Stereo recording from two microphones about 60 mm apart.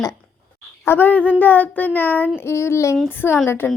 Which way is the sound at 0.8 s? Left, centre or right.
Left.